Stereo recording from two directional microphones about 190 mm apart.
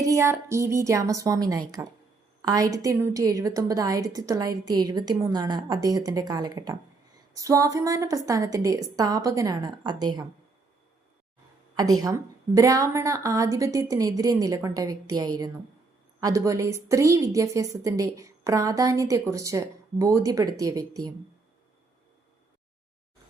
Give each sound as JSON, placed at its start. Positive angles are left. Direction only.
{"t": 0.0, "sound": "a woman's voice", "side_deg": -15}
{"t": 12.0, "sound": "a woman's voice", "side_deg": -15}